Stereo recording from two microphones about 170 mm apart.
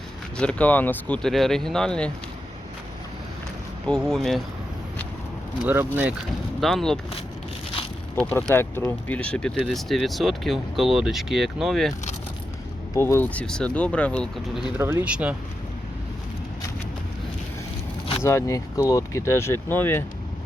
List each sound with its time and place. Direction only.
0.3 s speech: 5° left (ahead or behind)
3.8 s speech: 5° left (ahead or behind)
5.6 s speech: 10° right (ahead or behind)
6.6 s speech: centre (ahead or behind)
8.1 s speech: 10° left (ahead or behind)
12.9 s speech: 15° left (ahead or behind); by 15.4 s 5° right (ahead or behind)
18.2 s speech: 15° left (ahead or behind)